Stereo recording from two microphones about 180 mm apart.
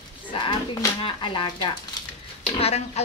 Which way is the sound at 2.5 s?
35° left (ahead or behind).